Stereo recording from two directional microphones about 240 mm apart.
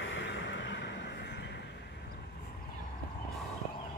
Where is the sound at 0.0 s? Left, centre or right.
Left.